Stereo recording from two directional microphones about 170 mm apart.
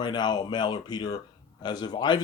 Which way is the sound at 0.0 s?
25° left (ahead or behind).